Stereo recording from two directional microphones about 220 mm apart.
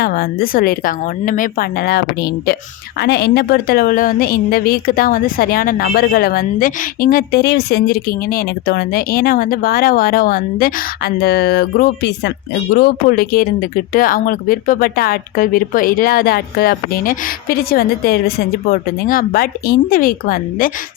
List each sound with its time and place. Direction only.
0.0 s a woman's voice: 45° left (ahead or behind)